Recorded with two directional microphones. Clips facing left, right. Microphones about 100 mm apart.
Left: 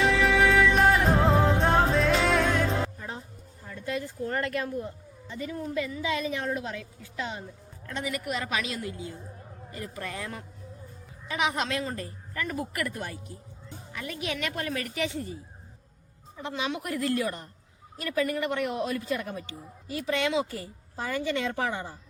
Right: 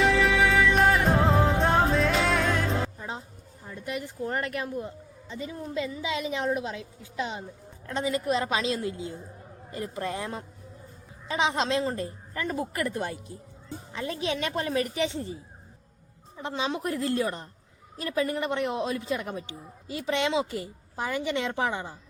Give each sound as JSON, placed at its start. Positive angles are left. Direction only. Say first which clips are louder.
{"t": 0.0, "sound": "music", "louder": "even", "side_deg": 0}
{"t": 3.0, "sound": "a sound", "louder": "right 2 dB", "side_deg": -20}
{"t": 5.3, "sound": "a man's voice", "louder": "left 1 dB", "side_deg": -20}
{"t": 16.4, "sound": "a man's voice", "louder": "right 2 dB", "side_deg": -30}